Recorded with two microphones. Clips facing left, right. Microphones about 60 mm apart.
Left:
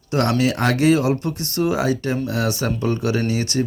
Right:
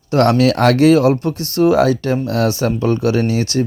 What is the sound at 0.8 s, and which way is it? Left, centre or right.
Speech, right.